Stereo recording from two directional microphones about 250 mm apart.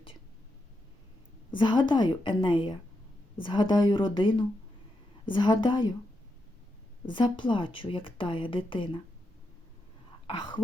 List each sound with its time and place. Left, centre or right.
1.5 s speech: centre
7.1 s speech: centre
10.2 s speech: centre